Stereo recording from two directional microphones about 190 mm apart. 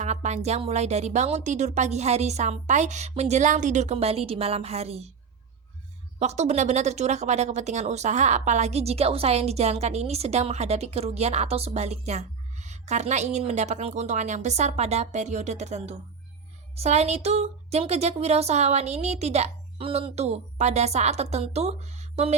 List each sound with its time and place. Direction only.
0.0 s speech: 35° right (ahead or behind)
6.1 s speech: 35° right (ahead or behind)